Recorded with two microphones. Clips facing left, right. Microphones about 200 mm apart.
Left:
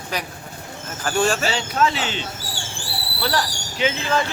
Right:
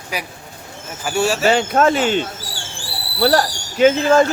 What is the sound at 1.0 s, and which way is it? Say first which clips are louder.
Speech: right 1 dB; 10° right (ahead or behind).